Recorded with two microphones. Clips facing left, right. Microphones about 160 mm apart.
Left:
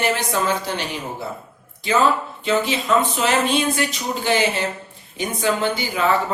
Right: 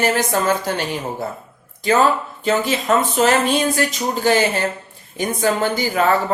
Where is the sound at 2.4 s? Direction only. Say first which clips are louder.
Right 2 dB; 45° right (ahead or behind).